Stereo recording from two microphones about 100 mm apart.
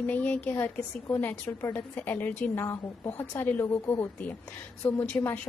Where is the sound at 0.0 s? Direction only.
15° left (ahead or behind).